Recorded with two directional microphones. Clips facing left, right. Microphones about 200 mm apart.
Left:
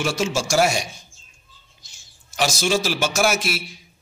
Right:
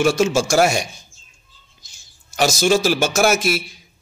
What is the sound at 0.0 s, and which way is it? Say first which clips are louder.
Speech: right 7 dB; 50° right (ahead or behind).